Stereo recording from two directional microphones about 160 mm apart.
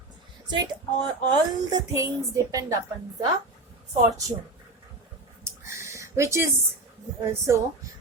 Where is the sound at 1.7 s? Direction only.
25° right (ahead or behind).